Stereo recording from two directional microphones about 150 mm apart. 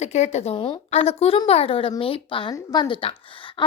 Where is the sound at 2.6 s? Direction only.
20° left (ahead or behind).